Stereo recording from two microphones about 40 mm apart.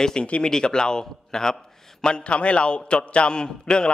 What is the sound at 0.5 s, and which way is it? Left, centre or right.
A man's voice, centre.